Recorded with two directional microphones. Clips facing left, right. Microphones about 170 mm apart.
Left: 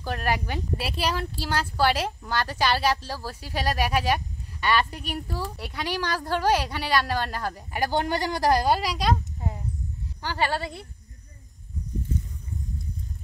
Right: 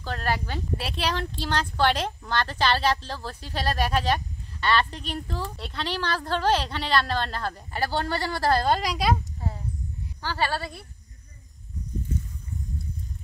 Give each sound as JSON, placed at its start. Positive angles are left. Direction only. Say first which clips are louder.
{"t": 0.0, "sound": "speech", "louder": "left 1 dB", "side_deg": 15}
{"t": 0.7, "sound": "speech", "louder": "even", "side_deg": 5}
{"t": 9.4, "sound": "a sound", "louder": "left 1 dB", "side_deg": 20}
{"t": 10.2, "sound": "speech", "louder": "left 1 dB", "side_deg": 15}